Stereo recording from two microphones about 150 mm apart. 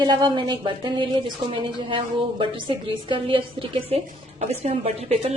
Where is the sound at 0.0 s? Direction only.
30° right (ahead or behind).